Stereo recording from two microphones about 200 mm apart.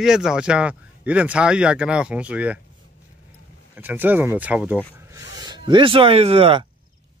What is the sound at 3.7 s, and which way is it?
Speech, 10° right (ahead or behind).